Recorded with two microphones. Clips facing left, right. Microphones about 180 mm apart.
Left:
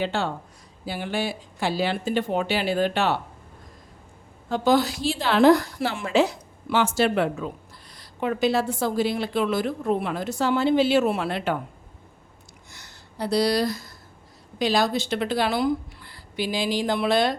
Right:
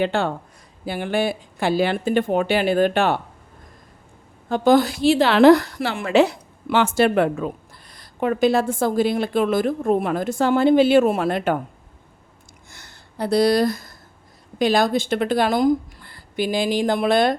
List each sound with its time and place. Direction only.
0.0 s speech: 55° right (ahead or behind)
4.4 s a woman's voice: 50° right (ahead or behind)
12.7 s a woman's voice: 50° right (ahead or behind)